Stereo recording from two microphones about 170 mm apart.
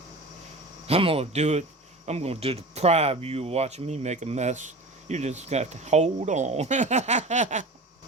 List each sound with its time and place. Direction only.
0.9 s speech: 35° right (ahead or behind)